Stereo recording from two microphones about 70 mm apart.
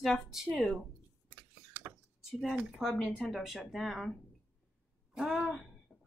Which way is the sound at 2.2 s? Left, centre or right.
Centre.